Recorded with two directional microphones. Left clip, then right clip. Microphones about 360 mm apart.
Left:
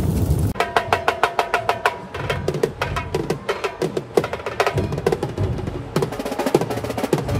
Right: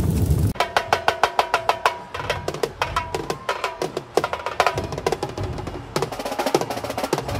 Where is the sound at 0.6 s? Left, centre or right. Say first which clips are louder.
Left 1 dB; centre.